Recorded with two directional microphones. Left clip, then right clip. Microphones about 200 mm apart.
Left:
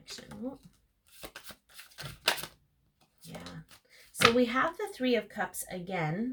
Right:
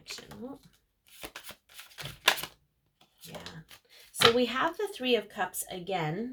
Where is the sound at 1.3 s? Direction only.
25° right (ahead or behind).